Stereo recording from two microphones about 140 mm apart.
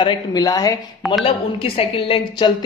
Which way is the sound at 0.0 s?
30° left (ahead or behind).